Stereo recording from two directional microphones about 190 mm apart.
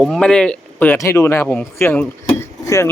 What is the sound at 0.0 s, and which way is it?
Speech, centre (ahead or behind).